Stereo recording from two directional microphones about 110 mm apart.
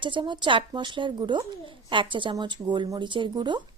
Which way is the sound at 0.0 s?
45° right (ahead or behind).